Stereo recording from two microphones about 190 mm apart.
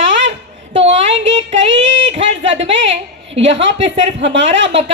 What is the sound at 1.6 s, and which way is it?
Speech, 75° right (ahead or behind).